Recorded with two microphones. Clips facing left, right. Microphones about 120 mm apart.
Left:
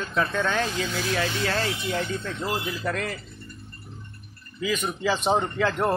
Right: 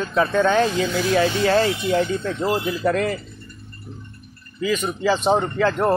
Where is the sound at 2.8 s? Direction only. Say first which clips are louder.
Right 8 dB; 5° right (ahead or behind).